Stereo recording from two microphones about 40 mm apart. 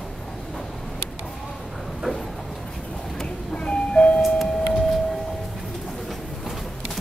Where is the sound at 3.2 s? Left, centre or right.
Left.